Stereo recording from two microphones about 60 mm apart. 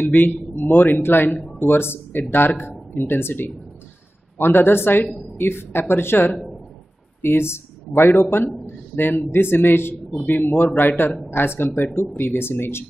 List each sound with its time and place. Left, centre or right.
0.0 s a man's voice: left